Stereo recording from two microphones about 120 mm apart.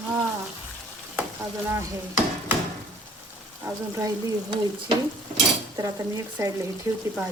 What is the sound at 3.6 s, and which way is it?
Speech, 25° right (ahead or behind).